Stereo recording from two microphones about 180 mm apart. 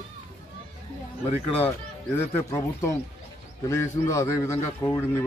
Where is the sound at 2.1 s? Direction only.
15° left (ahead or behind).